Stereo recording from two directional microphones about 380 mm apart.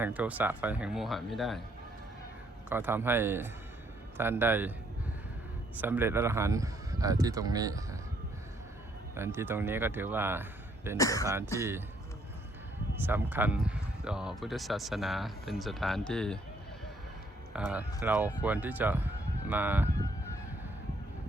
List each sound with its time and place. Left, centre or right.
0.0 s speech: centre
2.6 s speech: centre
5.7 s speech: centre
9.1 s speech: centre
10.9 s speech: centre
13.0 s speech: centre
17.5 s speech: centre